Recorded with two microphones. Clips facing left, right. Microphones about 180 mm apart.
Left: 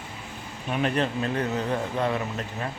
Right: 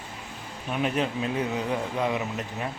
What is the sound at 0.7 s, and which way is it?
Speech, 5° right (ahead or behind).